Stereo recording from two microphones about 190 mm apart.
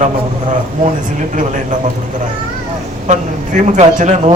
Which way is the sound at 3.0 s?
40° right (ahead or behind).